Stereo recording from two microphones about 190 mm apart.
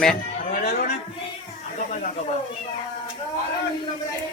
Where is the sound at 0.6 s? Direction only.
55° left (ahead or behind).